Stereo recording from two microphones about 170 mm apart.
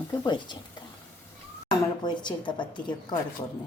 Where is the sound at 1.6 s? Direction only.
25° left (ahead or behind).